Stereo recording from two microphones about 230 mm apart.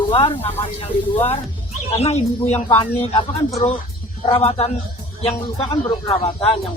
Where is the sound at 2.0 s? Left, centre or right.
Left.